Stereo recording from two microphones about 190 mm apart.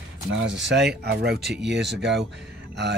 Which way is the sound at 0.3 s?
70° right (ahead or behind).